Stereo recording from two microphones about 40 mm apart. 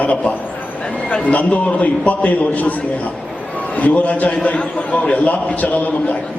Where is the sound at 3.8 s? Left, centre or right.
Left.